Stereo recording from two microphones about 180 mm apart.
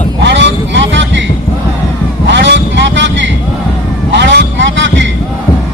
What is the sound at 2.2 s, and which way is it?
Vehicle, 80° right.